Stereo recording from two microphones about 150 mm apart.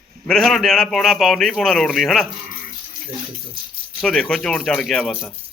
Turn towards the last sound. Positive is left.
turn(degrees=5)  # may be behind; listen again after turning